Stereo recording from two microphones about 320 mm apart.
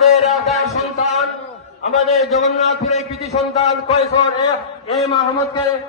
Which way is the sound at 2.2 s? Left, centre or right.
Centre.